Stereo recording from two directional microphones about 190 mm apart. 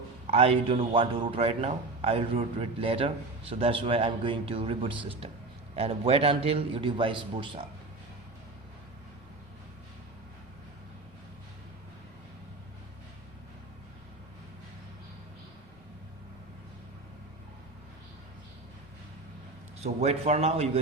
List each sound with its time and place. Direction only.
0.3 s a man's voice: 30° right (ahead or behind)
19.8 s a man's voice: 35° right (ahead or behind)